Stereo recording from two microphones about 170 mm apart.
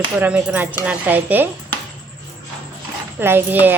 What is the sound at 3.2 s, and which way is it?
Speech, 10° right (ahead or behind).